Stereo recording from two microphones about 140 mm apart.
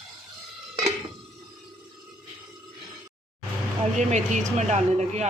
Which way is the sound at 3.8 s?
55° right (ahead or behind).